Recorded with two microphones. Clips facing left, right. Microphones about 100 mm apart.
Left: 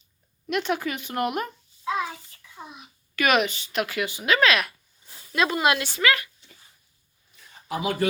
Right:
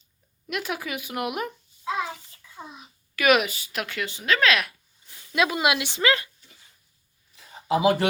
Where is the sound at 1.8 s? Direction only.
30° right (ahead or behind).